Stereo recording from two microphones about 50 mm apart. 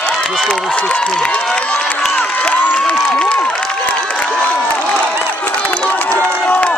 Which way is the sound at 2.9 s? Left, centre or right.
Centre.